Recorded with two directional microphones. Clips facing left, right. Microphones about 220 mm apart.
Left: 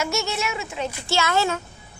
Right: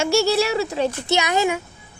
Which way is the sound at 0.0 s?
30° right (ahead or behind).